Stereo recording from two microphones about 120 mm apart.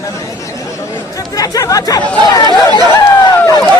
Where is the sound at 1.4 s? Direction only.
30° left (ahead or behind).